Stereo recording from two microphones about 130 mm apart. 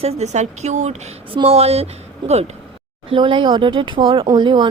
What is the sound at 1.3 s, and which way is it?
Speech, 50° right (ahead or behind).